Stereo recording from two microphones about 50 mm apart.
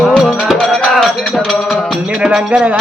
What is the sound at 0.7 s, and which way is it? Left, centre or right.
Music, centre.